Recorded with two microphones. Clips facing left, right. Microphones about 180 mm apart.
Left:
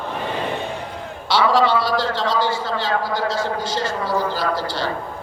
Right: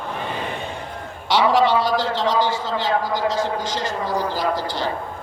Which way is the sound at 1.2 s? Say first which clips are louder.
Even; 15° right (ahead or behind).